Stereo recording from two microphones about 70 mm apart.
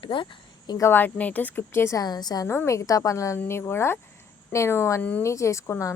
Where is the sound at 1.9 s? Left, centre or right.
Left.